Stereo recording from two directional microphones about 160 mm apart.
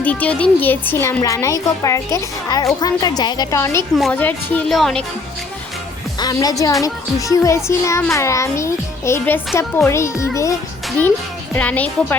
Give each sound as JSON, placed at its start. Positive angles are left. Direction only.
{"t": 0.0, "sound": "a woman's voice", "side_deg": 10}
{"t": 6.1, "sound": "a woman's voice", "side_deg": 25}
{"t": 11.5, "sound": "speech", "side_deg": 10}